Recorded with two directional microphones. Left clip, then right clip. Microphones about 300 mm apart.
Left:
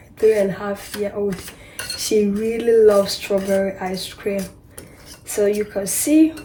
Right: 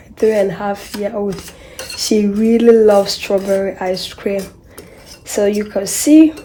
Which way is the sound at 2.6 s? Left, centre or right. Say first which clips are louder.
Right 4 dB; right.